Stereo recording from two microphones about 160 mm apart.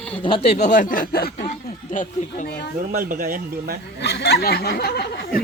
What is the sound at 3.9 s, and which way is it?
Speech, 90° left.